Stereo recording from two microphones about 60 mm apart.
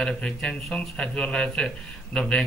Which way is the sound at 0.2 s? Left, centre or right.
Centre.